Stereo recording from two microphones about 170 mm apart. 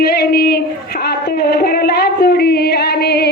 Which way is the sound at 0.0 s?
65° left (ahead or behind).